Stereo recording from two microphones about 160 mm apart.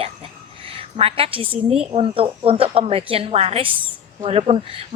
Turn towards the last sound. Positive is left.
turn(degrees=-35)  # may be behind; listen again after turning